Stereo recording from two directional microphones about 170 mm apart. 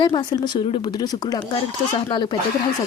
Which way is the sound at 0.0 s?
25° left (ahead or behind).